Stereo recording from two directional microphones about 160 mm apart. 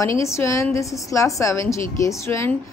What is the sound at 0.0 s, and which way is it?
A woman's voice, 20° left (ahead or behind).